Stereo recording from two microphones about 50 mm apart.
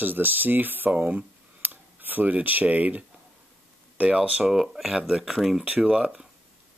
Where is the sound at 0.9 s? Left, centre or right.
Right.